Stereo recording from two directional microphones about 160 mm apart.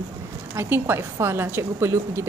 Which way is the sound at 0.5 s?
15° right (ahead or behind).